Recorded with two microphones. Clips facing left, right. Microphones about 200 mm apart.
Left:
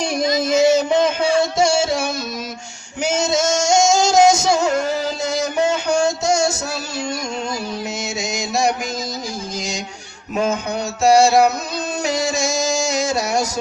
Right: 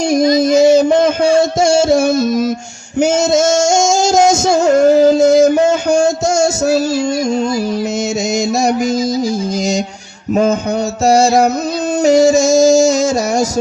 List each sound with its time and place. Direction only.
0.1 s music: 40° right (ahead or behind)
3.0 s singing: 45° right (ahead or behind)
11.0 s music: 45° right (ahead or behind)